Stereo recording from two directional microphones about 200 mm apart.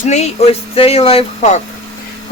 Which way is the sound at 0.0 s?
35° left (ahead or behind).